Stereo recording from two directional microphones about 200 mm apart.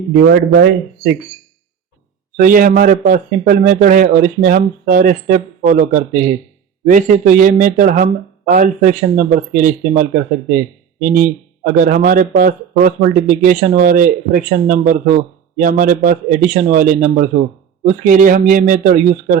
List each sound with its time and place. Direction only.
0.1 s speech: 55° right (ahead or behind)
2.4 s speech: 40° right (ahead or behind)